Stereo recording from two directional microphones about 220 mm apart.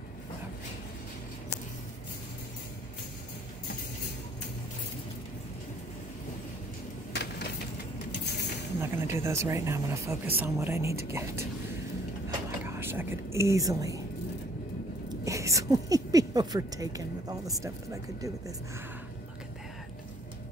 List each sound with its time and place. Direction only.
7.1 s vehicle: 50° left (ahead or behind)
8.8 s speech: 10° right (ahead or behind)
12.3 s a sound: 10° right (ahead or behind)
15.0 s speech: 15° right (ahead or behind)